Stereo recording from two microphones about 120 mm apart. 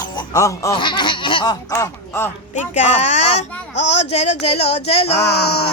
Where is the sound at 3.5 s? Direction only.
10° left (ahead or behind).